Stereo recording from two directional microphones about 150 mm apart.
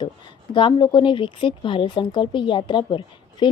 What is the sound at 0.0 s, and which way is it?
A woman's voice, 30° left (ahead or behind).